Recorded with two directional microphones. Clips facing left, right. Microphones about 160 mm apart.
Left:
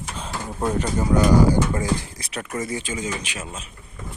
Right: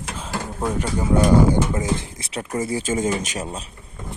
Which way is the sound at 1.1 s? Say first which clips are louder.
Right 1 dB; 20° right (ahead or behind).